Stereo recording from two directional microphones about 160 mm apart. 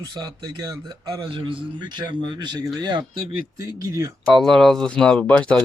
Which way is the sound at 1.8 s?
30° right (ahead or behind).